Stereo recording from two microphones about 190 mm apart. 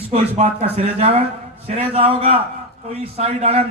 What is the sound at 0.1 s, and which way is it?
Speech, 35° right (ahead or behind).